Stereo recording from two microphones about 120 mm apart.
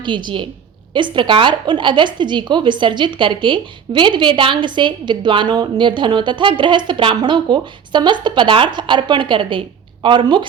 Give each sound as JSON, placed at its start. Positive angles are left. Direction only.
{"t": 0.0, "sound": "a woman's voice", "side_deg": -40}